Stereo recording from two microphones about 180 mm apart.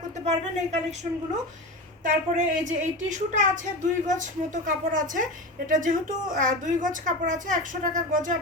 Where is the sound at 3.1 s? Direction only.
45° right (ahead or behind).